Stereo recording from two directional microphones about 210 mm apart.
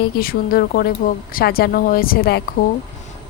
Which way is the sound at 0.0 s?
45° left (ahead or behind).